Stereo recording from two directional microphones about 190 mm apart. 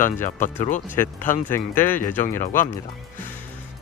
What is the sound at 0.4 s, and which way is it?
Speech, 40° left (ahead or behind).